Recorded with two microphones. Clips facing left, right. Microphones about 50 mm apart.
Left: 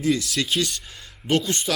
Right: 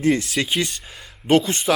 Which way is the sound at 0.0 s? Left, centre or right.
Right.